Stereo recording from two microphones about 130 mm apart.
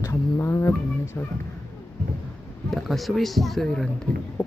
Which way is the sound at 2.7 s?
Centre (ahead or behind).